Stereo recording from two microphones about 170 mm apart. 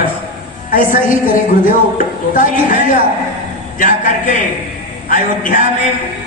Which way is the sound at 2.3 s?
50° left (ahead or behind).